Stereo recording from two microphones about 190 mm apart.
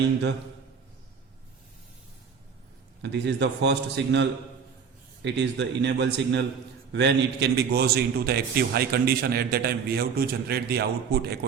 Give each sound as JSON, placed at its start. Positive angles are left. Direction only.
{"t": 3.0, "sound": "a man's voice", "side_deg": -65}